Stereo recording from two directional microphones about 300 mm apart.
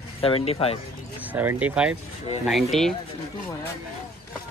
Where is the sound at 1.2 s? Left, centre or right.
Centre.